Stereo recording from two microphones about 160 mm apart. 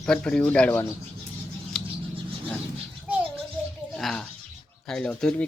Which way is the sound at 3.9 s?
5° left (ahead or behind).